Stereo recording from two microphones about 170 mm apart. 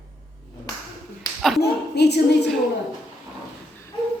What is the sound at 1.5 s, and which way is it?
Speech, 75° left (ahead or behind).